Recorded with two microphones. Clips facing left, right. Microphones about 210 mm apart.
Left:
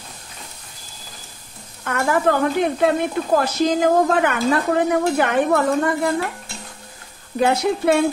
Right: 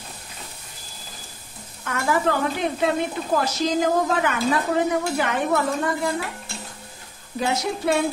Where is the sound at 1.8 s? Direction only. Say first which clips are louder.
Left 3 dB; 55° left (ahead or behind).